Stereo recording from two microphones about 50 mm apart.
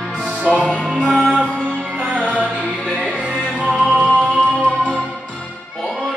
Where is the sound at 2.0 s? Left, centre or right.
Right.